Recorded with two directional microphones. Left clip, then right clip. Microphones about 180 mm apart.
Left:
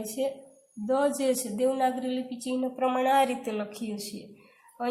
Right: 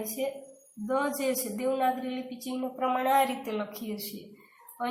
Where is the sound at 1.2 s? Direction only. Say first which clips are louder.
Left 4 dB; 40° left (ahead or behind).